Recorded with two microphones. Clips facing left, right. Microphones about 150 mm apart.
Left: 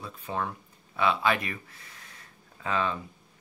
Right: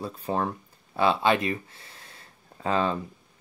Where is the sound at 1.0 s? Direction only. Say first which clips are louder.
Right 4 dB; 30° right (ahead or behind).